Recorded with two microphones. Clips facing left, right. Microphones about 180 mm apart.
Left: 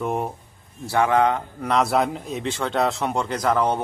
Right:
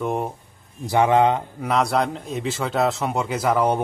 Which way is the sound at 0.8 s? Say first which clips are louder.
Right 2 dB; 20° right (ahead or behind).